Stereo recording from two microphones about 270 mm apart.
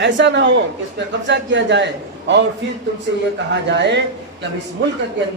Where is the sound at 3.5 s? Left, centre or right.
Right.